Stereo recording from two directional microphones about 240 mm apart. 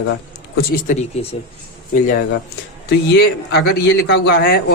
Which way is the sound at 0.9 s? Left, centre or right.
Left.